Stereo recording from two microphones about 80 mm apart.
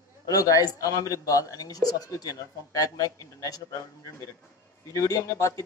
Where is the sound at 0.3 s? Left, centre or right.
Left.